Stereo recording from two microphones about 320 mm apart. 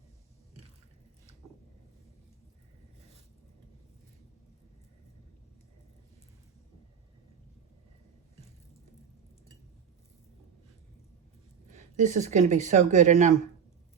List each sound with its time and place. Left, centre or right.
11.9 s speech: right